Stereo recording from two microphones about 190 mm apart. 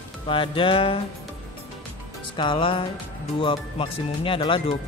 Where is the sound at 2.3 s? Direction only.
25° left (ahead or behind).